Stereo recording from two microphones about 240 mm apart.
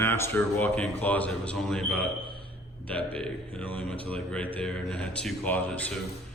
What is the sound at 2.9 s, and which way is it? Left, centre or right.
Speech, centre.